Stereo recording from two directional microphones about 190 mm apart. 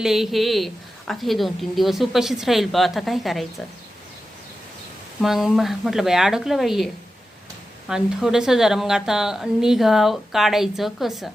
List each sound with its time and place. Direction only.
0.0 s speech: centre (ahead or behind)
5.2 s speech: centre (ahead or behind)